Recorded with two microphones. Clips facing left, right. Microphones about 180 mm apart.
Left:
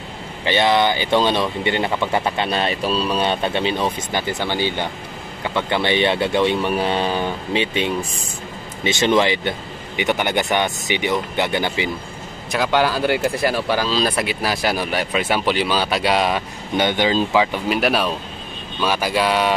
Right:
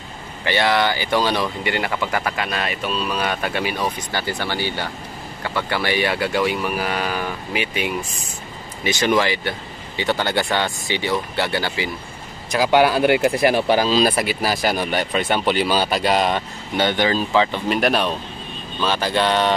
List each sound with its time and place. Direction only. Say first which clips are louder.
0.5 s speech: left 2 dB; 20° left (ahead or behind)
12.4 s a man's voice: right 2 dB; centre (ahead or behind)
12.7 s speech: right 4 dB; 15° right (ahead or behind); by 16.4 s centre (ahead or behind)
16.7 s speech: left 1 dB; 15° left (ahead or behind)